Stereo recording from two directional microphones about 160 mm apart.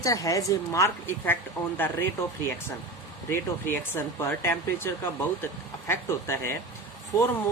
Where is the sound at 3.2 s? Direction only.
15° left (ahead or behind).